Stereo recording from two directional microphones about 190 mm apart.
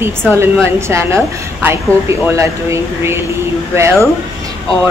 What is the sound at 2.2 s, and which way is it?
Speech, 15° right (ahead or behind).